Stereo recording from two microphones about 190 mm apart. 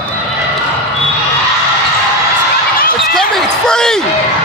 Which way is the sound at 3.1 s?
5° left (ahead or behind).